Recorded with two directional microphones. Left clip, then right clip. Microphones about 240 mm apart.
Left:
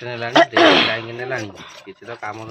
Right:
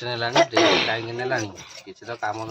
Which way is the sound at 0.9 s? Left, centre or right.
Centre.